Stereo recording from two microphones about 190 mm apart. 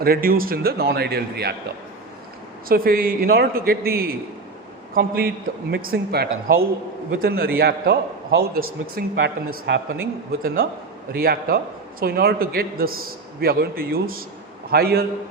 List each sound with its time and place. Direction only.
0.0 s a man's voice: 50° right (ahead or behind)
2.6 s a man's voice: 50° right (ahead or behind)
9.5 s speech: 70° right (ahead or behind)
10.4 s a man's voice: 50° right (ahead or behind)